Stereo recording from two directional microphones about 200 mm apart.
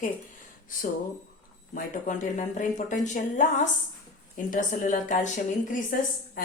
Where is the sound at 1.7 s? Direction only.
40° left (ahead or behind).